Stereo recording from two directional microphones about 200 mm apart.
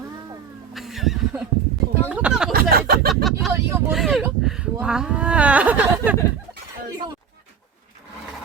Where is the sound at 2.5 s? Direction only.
45° right (ahead or behind).